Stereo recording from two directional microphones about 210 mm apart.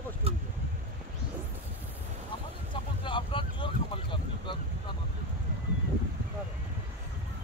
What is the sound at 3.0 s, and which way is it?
Vehicle, 25° left (ahead or behind).